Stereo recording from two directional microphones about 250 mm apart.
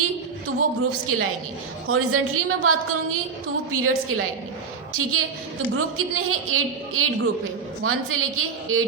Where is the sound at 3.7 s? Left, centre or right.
Right.